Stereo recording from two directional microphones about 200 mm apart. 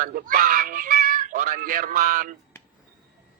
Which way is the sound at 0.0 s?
45° right (ahead or behind).